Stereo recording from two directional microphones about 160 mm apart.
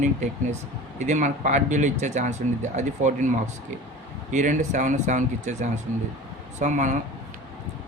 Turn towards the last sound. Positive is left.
turn(degrees=-50)  # may be behind; listen again after turning